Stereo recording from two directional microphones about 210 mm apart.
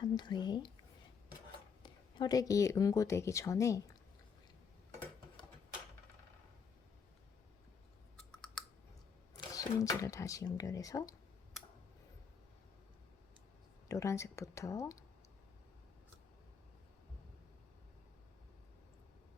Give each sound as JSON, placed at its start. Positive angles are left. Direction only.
{"t": 0.0, "sound": "speech", "side_deg": 20}
{"t": 1.8, "sound": "speech", "side_deg": 20}
{"t": 8.3, "sound": "clicking", "side_deg": 5}
{"t": 9.6, "sound": "speech", "side_deg": 15}
{"t": 13.8, "sound": "speech", "side_deg": 15}